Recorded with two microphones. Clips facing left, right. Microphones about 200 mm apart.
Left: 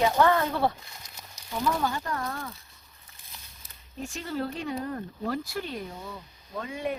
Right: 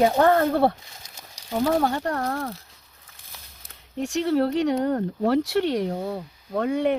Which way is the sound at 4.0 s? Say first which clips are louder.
Right 10 dB; 75° right (ahead or behind).